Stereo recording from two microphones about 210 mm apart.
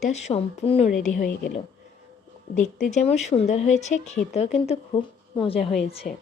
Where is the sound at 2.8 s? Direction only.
35° left (ahead or behind).